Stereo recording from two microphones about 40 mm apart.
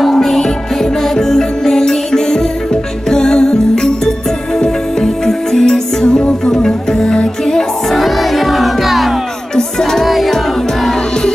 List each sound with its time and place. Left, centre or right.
0.1 s music: centre
8.0 s music: centre
9.6 s music: centre
10.0 s music: centre